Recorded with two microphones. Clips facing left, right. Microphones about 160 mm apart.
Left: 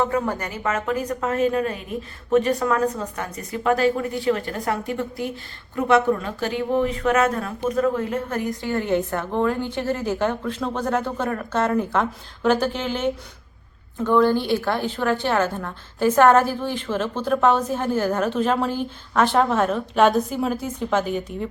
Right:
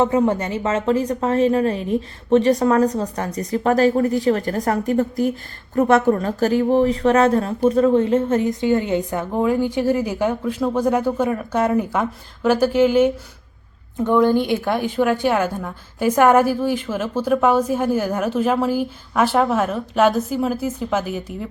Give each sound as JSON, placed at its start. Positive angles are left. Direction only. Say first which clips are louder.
{"t": 0.0, "sound": "a woman's voice", "louder": "right 6 dB", "side_deg": -20}